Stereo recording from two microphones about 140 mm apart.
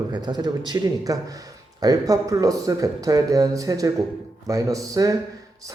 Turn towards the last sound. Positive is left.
turn(degrees=-25)  # may be behind; listen again after turning